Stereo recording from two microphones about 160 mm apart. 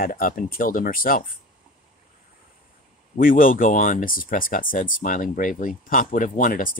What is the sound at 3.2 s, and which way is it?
Speech, 60° left (ahead or behind).